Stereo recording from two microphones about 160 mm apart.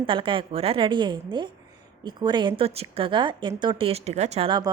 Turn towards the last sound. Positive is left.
turn(degrees=-30)  # may be behind; listen again after turning